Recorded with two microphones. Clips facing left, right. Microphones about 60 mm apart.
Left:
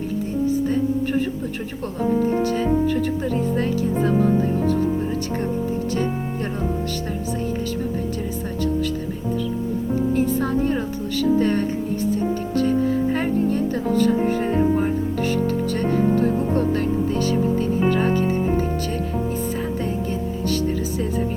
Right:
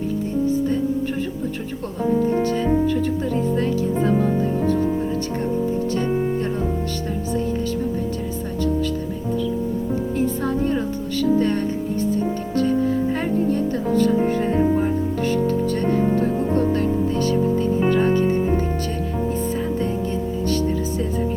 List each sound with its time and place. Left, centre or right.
2.6 s speech: left
10.2 s speech: left
13.2 s music: left
14.3 s speech: left